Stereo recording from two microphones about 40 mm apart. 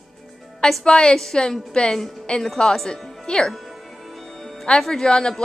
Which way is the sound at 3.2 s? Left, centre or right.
Left.